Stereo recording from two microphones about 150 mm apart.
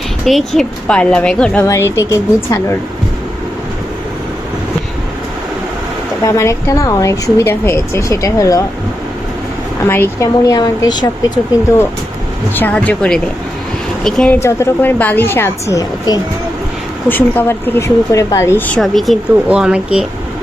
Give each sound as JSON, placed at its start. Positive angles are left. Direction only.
{"t": 0.3, "sound": "speech", "side_deg": 0}
{"t": 1.6, "sound": "speech", "side_deg": 20}
{"t": 6.2, "sound": "speech", "side_deg": 20}
{"t": 9.8, "sound": "speech", "side_deg": 15}
{"t": 12.5, "sound": "speech", "side_deg": 10}
{"t": 14.3, "sound": "speech", "side_deg": 20}
{"t": 17.1, "sound": "speech", "side_deg": 15}
{"t": 18.8, "sound": "speech", "side_deg": 0}